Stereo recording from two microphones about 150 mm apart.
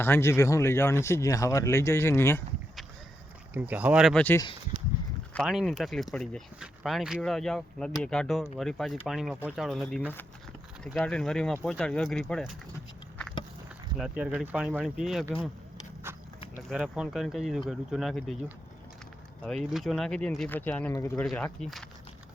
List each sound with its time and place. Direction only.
0.0 s speech: 15° left (ahead or behind)
3.5 s speech: 10° right (ahead or behind)
4.1 s speech: 10° left (ahead or behind)
5.5 s speech: centre (ahead or behind)
14.0 s speech: 10° right (ahead or behind)
16.1 s a sound: 15° right (ahead or behind)
16.6 s speech: 5° right (ahead or behind)
19.4 s speech: 5° left (ahead or behind)